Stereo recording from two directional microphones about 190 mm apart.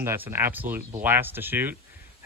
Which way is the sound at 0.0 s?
15° right (ahead or behind).